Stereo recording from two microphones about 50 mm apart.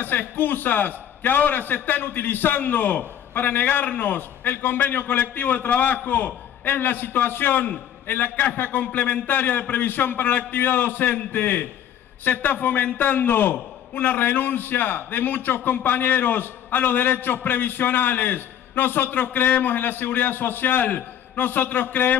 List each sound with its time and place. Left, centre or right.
0.0 s a man's voice: left